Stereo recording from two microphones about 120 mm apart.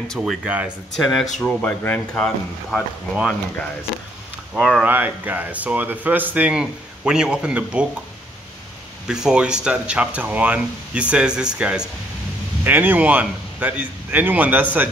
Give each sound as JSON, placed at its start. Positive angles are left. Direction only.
{"t": 0.2, "sound": "speech", "side_deg": -10}
{"t": 1.6, "sound": "speech", "side_deg": 15}
{"t": 2.1, "sound": "speech", "side_deg": 5}
{"t": 4.6, "sound": "speech", "side_deg": 0}
{"t": 4.8, "sound": "speech", "side_deg": -15}
{"t": 9.0, "sound": "speech", "side_deg": -5}